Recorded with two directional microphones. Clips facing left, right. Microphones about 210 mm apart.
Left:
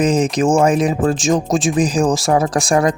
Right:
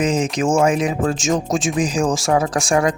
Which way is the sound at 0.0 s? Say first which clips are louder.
Left 4 dB; 35° left (ahead or behind).